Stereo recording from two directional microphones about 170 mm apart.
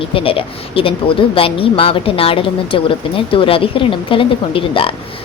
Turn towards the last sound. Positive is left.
turn(degrees=30)  # may be behind; listen again after turning